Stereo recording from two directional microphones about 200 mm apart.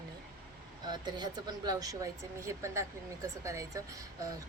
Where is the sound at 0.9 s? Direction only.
20° right (ahead or behind).